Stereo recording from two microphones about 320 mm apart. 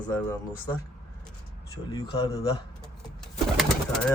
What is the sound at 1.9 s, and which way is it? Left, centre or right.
Speech, centre.